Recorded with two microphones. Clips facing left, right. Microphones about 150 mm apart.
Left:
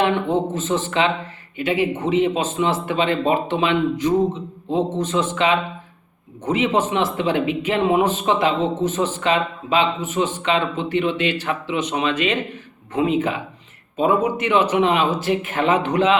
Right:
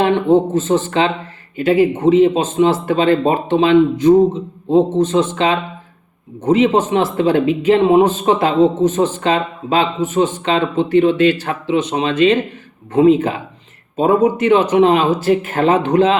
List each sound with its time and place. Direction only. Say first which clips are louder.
0.0 s a man's voice: right 6 dB; 35° right (ahead or behind)